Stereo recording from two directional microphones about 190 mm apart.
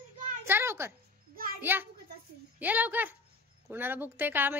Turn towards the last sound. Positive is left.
turn(degrees=-10)  # may be behind; listen again after turning